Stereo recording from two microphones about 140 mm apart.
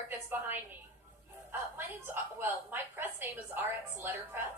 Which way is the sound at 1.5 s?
15° right (ahead or behind).